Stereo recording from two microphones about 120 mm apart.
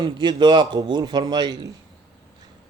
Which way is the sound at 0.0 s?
40° right (ahead or behind).